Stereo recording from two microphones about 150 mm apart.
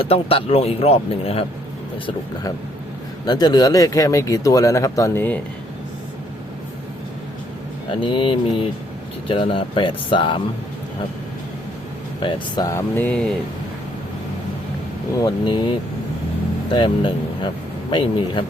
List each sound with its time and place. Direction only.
0.0 s speech: 40° left (ahead or behind)
3.2 s speech: 25° left (ahead or behind)
7.9 s speech: 35° left (ahead or behind)
12.2 s speech: 25° left (ahead or behind); by 13.3 s 5° left (ahead or behind)
15.2 s speech: 30° left (ahead or behind)